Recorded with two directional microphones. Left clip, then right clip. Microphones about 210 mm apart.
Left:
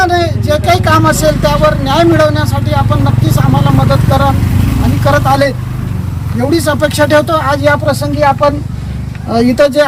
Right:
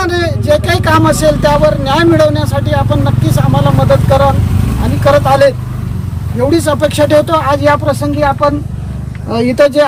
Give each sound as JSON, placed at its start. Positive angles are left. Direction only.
{"t": 0.0, "sound": "speech", "side_deg": -15}